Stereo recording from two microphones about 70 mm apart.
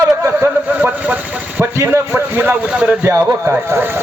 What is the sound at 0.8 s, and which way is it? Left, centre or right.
Speech, right.